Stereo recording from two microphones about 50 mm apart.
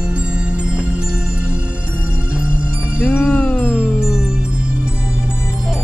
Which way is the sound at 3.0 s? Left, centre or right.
Left.